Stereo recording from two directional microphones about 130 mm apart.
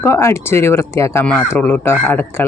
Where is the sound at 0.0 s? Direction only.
20° left (ahead or behind).